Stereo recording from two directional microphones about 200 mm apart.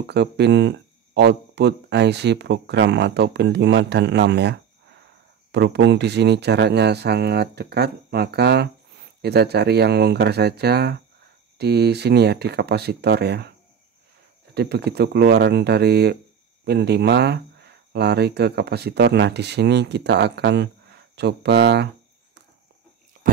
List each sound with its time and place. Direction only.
0.0 s speech: 55° right (ahead or behind)
14.5 s speech: 55° right (ahead or behind)